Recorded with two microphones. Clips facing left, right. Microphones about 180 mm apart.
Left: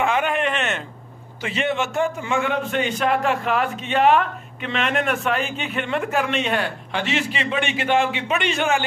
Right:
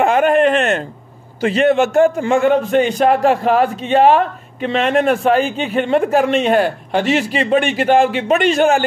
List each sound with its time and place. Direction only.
0.0 s a man's voice: 45° right (ahead or behind)